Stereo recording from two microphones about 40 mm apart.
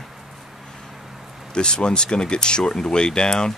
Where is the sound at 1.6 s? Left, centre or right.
Left.